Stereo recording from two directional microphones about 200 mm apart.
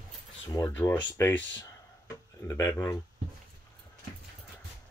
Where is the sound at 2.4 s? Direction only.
15° left (ahead or behind).